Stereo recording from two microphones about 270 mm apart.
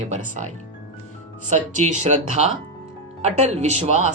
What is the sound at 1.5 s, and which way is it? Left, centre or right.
Speech, right.